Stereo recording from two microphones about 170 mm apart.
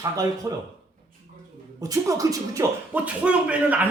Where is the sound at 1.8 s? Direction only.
20° right (ahead or behind).